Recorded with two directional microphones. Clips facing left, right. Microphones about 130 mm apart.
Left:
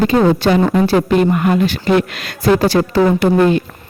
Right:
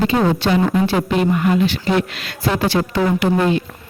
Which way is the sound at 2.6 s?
40° left (ahead or behind).